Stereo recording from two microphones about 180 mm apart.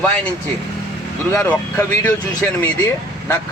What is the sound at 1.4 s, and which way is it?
Speech, 10° left (ahead or behind).